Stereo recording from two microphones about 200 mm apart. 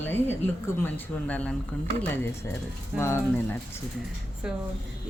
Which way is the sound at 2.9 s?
10° left (ahead or behind).